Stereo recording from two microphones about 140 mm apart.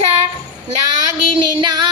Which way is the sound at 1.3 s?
35° right (ahead or behind).